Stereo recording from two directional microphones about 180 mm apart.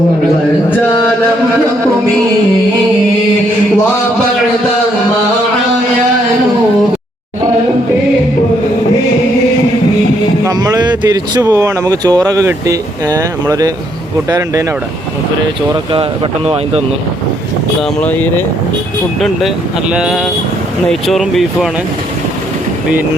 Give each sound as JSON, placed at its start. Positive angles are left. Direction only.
{"t": 10.4, "sound": "speech", "side_deg": -20}
{"t": 18.0, "sound": "speech", "side_deg": 10}
{"t": 19.9, "sound": "speech", "side_deg": -5}